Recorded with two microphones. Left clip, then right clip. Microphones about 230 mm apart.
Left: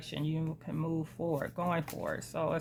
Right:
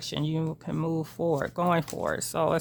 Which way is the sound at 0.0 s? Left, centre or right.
Right.